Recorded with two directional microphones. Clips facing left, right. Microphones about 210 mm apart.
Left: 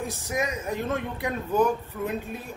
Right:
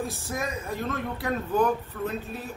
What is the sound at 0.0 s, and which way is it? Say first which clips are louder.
Speech: left 2 dB; 15° left (ahead or behind).